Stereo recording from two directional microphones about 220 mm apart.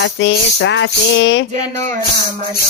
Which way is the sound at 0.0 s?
55° left (ahead or behind).